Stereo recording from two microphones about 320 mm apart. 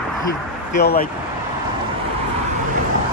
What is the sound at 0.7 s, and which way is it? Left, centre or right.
Speech, left.